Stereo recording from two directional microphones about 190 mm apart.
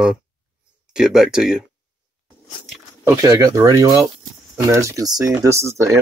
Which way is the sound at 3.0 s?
15° right (ahead or behind).